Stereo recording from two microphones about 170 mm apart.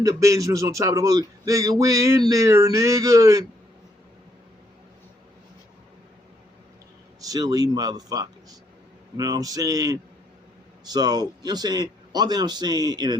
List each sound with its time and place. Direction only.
0.0 s a man's voice: 20° right (ahead or behind)
7.3 s a man's voice: 20° right (ahead or behind)